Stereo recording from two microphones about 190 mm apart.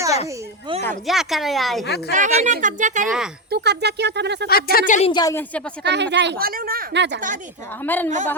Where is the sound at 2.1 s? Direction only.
40° right (ahead or behind).